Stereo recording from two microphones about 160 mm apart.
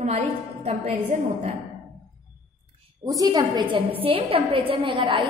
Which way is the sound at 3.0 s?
25° right (ahead or behind).